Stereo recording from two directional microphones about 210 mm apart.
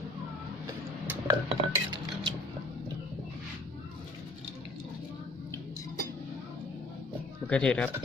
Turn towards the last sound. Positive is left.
turn(degrees=5)  # may be behind; listen again after turning